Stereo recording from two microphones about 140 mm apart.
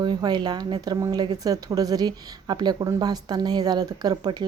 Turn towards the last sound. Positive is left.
turn(degrees=-30)  # may be behind; listen again after turning